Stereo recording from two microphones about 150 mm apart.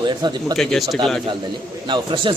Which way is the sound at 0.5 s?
Centre (ahead or behind).